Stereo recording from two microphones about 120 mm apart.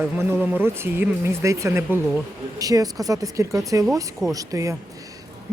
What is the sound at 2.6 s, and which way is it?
Speech, 30° right (ahead or behind).